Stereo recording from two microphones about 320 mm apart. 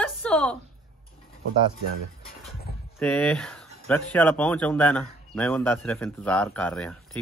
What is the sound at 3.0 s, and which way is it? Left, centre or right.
A man's voice, centre.